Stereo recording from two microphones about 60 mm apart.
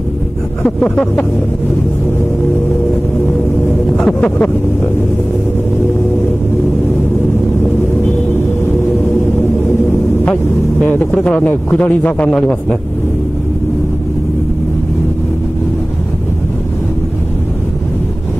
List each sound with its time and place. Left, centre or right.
0.7 s a sound: centre
4.0 s a man's voice: left
10.2 s speech: left
11.2 s a man's voice: left